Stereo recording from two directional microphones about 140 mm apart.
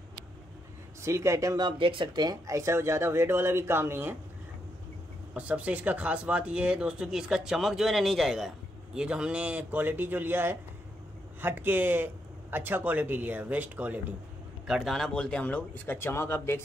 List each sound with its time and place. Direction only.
1.0 s speech: 20° right (ahead or behind)
5.3 s speech: 10° right (ahead or behind)
14.7 s speech: centre (ahead or behind); by 16.6 s 15° left (ahead or behind)